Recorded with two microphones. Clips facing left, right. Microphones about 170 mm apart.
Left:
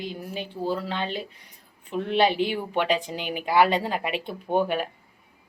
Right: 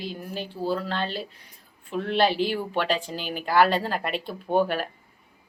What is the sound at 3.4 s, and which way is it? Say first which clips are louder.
Speech: even; 10° left (ahead or behind).